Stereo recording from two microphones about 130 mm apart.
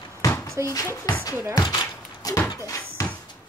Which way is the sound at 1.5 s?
30° left (ahead or behind).